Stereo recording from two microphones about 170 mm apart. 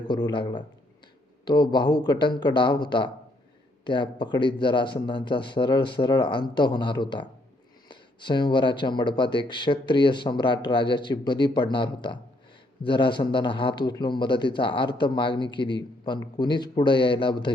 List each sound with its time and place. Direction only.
0.1 s speech: 25° left (ahead or behind)